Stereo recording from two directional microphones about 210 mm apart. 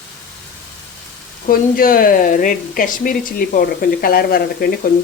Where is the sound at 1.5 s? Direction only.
45° left (ahead or behind).